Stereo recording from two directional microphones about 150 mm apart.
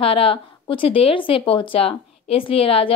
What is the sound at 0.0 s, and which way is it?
A woman's voice, 40° left (ahead or behind).